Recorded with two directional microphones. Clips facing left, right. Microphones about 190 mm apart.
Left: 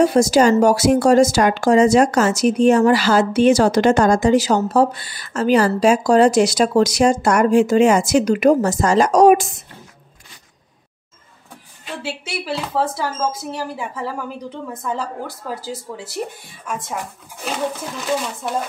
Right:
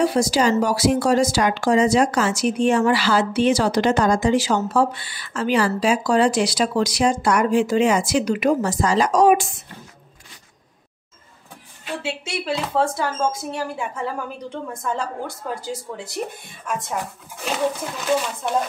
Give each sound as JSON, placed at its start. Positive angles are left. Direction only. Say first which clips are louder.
{"t": 0.0, "sound": "speech", "louder": "left 5 dB", "side_deg": 45}
{"t": 12.0, "sound": "speech", "louder": "left 2 dB", "side_deg": 5}